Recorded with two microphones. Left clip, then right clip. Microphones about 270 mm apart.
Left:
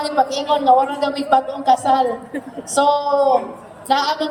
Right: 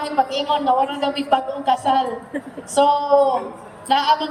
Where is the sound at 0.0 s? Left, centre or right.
Left.